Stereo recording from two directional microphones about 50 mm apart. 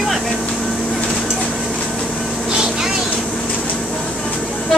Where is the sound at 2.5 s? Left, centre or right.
Centre.